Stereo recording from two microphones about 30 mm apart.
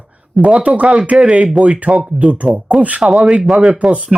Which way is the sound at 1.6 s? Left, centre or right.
Right.